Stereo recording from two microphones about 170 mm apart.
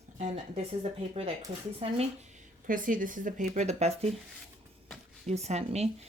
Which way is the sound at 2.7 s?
50° right (ahead or behind).